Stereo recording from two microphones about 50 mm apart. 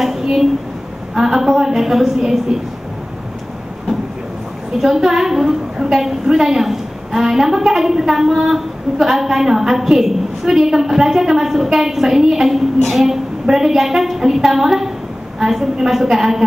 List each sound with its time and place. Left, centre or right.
0.0 s a woman's voice: centre
4.7 s a woman's voice: centre